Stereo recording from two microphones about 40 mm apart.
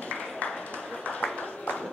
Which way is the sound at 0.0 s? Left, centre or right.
Left.